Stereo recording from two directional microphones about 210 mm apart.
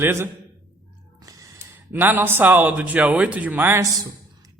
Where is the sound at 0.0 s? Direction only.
10° right (ahead or behind).